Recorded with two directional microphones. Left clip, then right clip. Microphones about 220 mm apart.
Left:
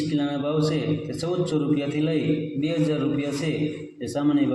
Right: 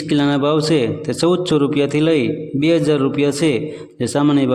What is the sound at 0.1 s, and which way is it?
A man's voice, 50° right (ahead or behind).